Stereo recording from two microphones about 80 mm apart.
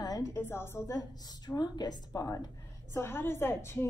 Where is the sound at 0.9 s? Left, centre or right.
Left.